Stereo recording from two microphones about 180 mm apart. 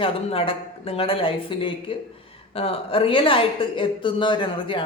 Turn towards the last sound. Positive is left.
turn(degrees=25)  # may be behind; listen again after turning